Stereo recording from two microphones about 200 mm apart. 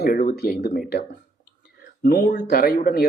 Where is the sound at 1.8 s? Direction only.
50° left (ahead or behind).